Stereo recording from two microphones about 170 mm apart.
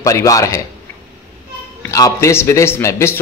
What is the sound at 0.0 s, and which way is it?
Speech, 20° left (ahead or behind).